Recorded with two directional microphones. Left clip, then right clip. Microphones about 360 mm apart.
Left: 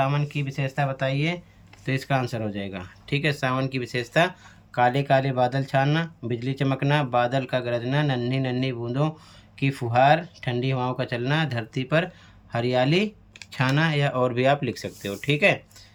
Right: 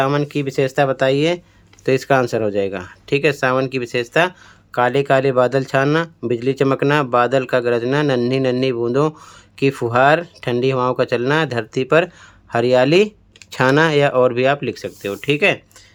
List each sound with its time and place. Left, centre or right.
0.0 s speech: centre